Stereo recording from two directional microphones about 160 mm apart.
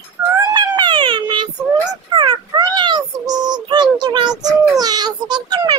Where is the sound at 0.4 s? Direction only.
25° right (ahead or behind).